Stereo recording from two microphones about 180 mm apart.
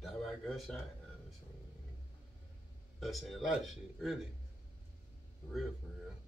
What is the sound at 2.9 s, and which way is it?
A man's voice, centre (ahead or behind).